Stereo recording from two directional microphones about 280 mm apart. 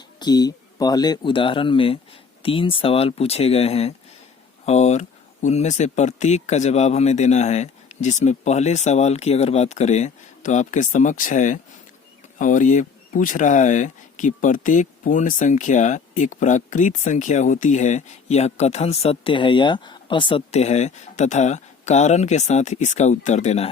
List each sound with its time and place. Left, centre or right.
0.2 s speech: centre